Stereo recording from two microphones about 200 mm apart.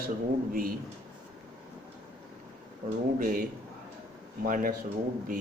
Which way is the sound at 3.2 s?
40° right (ahead or behind).